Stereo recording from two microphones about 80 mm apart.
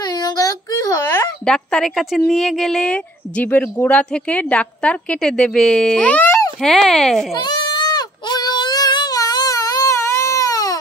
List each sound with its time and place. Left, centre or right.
0.0 s child singing: left
1.4 s a woman's voice: centre
6.6 s speech: centre
7.3 s goat: left